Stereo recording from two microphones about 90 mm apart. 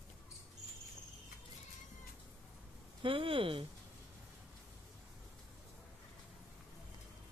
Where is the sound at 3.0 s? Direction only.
85° right.